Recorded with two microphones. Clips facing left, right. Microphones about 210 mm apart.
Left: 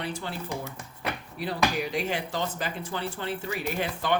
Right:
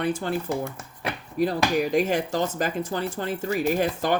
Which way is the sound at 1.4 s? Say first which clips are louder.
Right 6 dB; 45° right (ahead or behind).